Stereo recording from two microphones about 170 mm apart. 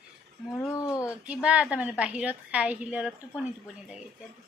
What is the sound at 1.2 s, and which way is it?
A woman's voice, 5° right (ahead or behind).